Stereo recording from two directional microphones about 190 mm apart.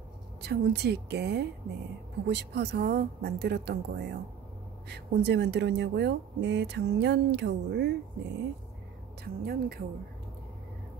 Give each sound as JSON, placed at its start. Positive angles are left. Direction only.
{"t": 0.4, "sound": "speech", "side_deg": -60}
{"t": 9.2, "sound": "speech", "side_deg": -55}